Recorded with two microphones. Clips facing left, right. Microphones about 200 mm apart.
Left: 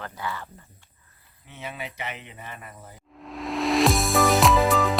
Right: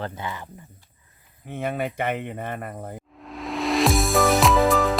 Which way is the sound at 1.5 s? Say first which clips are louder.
Right 10 dB; 55° right (ahead or behind).